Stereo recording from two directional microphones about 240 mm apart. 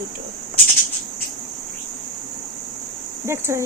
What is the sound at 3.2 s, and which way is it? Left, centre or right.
Speech, centre.